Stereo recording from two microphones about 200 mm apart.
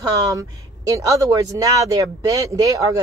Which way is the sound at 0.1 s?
15° right (ahead or behind).